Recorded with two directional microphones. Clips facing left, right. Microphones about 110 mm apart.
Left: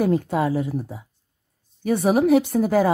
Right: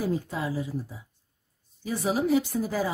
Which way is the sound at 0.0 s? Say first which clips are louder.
Left 9 dB; 65° left (ahead or behind).